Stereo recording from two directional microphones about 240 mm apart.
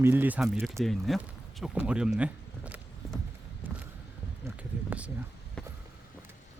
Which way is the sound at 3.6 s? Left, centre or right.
Centre.